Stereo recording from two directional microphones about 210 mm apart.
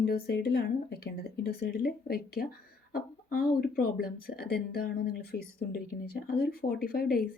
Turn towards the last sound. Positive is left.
turn(degrees=45)  # may be behind; listen again after turning